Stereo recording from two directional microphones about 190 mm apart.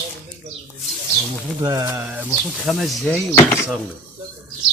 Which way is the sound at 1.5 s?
20° right (ahead or behind).